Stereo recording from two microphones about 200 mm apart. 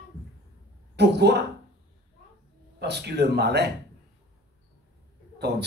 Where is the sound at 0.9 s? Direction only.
55° right (ahead or behind).